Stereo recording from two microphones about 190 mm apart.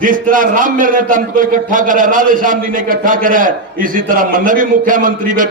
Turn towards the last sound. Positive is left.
turn(degrees=-45)  # may be behind; listen again after turning